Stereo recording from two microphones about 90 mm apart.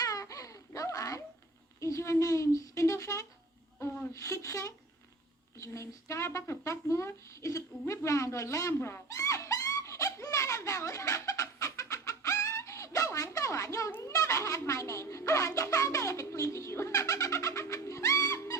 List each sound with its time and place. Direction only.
0.0 s baby cry: 40° left (ahead or behind)
1.8 s speech: 30° left (ahead or behind)